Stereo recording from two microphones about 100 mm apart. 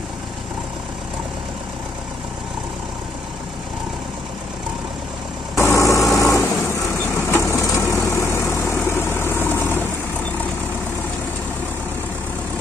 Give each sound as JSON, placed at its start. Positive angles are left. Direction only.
{"t": 5.6, "sound": "vehicle", "side_deg": 30}